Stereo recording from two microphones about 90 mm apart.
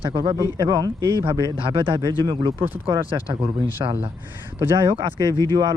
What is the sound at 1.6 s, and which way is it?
Speech, 70° right (ahead or behind).